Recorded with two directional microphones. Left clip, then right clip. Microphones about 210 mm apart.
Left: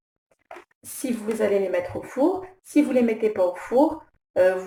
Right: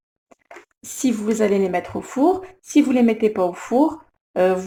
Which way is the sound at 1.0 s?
50° right (ahead or behind).